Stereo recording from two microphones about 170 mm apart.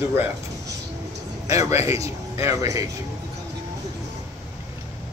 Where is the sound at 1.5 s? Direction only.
15° right (ahead or behind).